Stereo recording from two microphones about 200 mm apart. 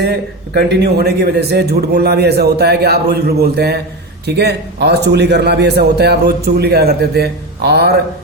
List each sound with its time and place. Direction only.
0.0 s a man's voice: 55° right (ahead or behind)